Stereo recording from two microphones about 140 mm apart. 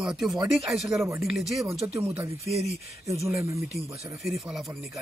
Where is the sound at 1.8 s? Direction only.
15° right (ahead or behind).